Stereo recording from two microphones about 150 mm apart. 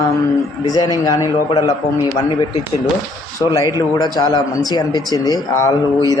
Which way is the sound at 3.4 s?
20° left (ahead or behind).